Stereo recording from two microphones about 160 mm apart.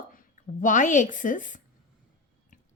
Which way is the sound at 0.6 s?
55° left (ahead or behind).